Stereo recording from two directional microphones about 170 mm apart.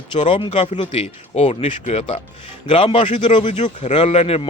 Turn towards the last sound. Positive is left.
turn(degrees=35)  # may be behind; listen again after turning